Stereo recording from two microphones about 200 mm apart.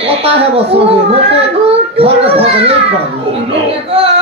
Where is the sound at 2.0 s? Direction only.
30° right (ahead or behind).